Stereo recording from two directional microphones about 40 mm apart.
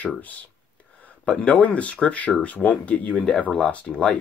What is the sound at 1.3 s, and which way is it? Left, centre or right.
Speech, left.